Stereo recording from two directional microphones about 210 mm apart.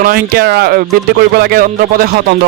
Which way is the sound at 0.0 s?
45° right (ahead or behind).